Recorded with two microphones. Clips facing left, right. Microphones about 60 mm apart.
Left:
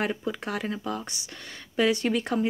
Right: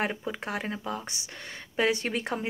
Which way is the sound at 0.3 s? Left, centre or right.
Right.